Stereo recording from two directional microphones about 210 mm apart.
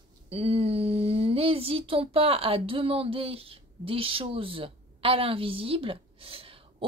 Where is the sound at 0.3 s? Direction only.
30° right (ahead or behind).